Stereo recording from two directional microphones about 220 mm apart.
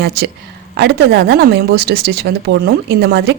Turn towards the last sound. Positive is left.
turn(degrees=-50)  # may be behind; listen again after turning